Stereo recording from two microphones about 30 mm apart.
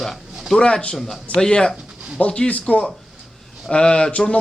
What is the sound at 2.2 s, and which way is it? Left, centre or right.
Speech, left.